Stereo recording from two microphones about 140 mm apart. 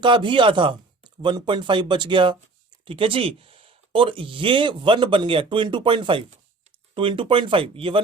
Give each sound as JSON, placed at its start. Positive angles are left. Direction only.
{"t": 0.0, "sound": "speech", "side_deg": -35}